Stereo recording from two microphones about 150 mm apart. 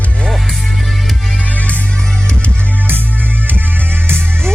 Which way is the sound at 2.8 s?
15° right (ahead or behind).